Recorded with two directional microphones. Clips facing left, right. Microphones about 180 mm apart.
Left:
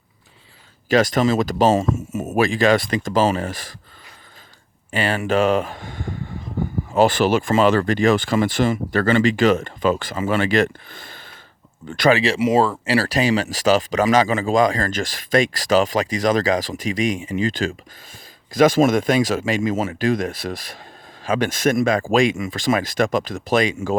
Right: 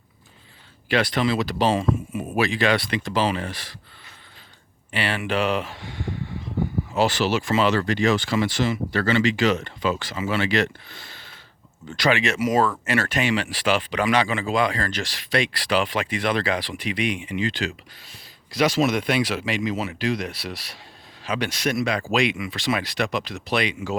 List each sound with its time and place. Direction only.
0.9 s speech: 45° left (ahead or behind)
4.9 s speech: 45° left (ahead or behind)
12.1 s speech: 30° left (ahead or behind)